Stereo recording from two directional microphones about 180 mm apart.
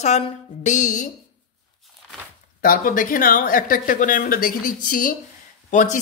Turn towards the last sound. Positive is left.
turn(degrees=45)  # may be behind; listen again after turning